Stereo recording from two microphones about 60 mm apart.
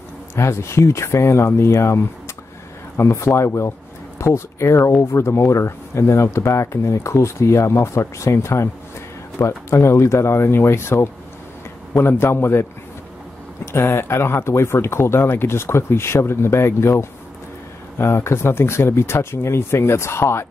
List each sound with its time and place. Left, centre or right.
0.4 s speech: left
13.7 s speech: left